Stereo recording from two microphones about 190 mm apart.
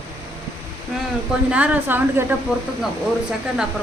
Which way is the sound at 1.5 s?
5° right (ahead or behind).